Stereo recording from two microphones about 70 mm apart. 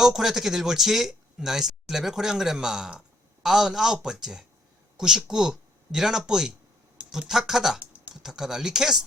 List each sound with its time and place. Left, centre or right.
0.0 s speech: centre
7.8 s typing: right
8.1 s speech: centre